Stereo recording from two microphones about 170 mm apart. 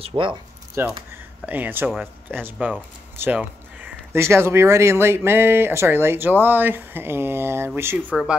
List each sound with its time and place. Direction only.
0.1 s speech: 20° right (ahead or behind)
1.1 s a sound: 10° right (ahead or behind)
2.3 s speech: 10° right (ahead or behind)